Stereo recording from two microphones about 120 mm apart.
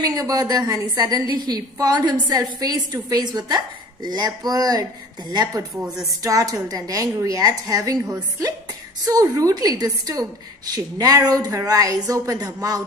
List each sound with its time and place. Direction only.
0.0 s a woman's voice: 30° right (ahead or behind)